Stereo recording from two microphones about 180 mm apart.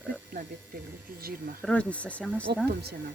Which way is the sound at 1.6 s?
5° left (ahead or behind).